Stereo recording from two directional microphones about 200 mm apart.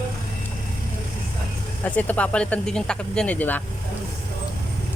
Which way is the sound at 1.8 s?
10° left (ahead or behind).